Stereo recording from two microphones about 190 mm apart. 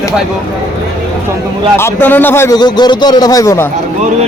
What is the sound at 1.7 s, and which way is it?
A man's voice, 10° left (ahead or behind).